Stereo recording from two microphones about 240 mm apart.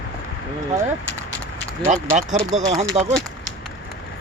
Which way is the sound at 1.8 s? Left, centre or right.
Right.